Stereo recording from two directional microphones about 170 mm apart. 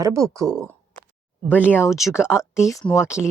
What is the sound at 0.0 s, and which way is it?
Speech, 20° right (ahead or behind).